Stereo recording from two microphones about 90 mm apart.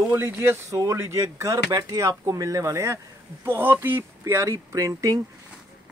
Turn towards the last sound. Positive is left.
turn(degrees=-35)  # may be behind; listen again after turning